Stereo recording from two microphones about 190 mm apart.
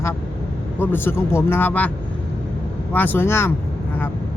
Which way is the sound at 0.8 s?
10° left (ahead or behind).